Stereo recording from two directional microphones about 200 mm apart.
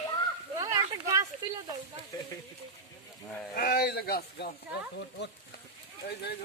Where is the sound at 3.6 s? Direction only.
50° left (ahead or behind).